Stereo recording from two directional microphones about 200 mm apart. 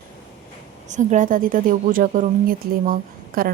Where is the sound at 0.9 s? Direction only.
40° right (ahead or behind).